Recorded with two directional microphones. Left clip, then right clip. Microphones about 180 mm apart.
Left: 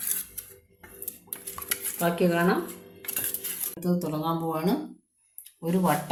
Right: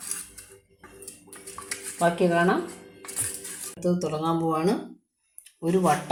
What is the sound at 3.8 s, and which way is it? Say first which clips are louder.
Speech: right 3 dB; 35° right (ahead or behind).